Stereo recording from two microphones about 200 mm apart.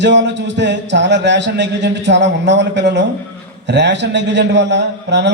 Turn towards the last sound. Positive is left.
turn(degrees=-60)  # may be behind; listen again after turning